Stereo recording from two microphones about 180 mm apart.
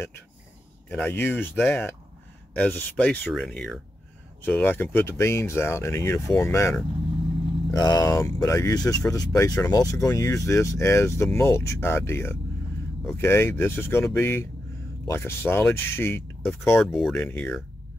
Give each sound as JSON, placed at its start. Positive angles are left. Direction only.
{"t": 0.8, "sound": "speech", "side_deg": 10}
{"t": 16.8, "sound": "speech", "side_deg": 0}